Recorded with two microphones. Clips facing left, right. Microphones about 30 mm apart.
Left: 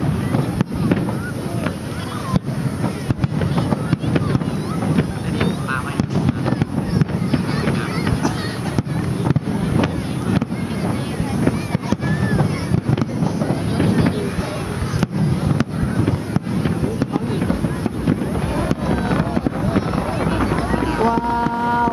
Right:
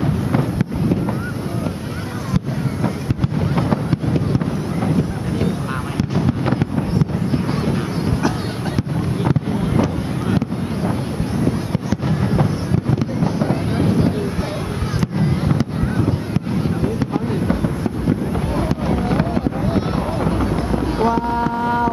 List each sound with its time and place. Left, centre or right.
6.9 s honk: left
13.2 s fireworks: right
13.7 s a sound: left
19.3 s vehicle: centre
20.2 s a sound: left
21.0 s boat: centre